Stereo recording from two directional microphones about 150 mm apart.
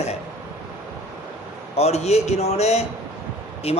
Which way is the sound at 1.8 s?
45° left (ahead or behind).